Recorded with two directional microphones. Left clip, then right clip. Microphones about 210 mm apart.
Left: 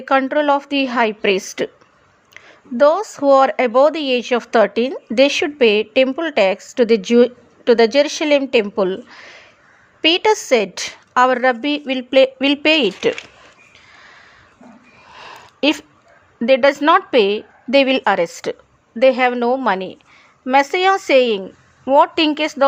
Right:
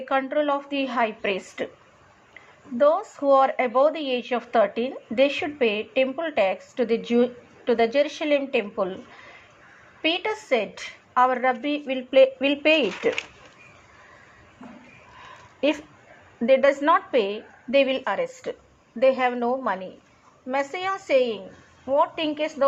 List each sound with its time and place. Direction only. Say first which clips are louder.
0.0 s speech: left 8 dB; 50° left (ahead or behind)
15.2 s a sound: left 6 dB; 40° left (ahead or behind)
16.5 s speech: left 6 dB; 45° left (ahead or behind)